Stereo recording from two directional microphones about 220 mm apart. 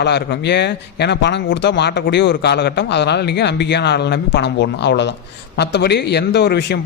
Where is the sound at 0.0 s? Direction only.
50° left (ahead or behind).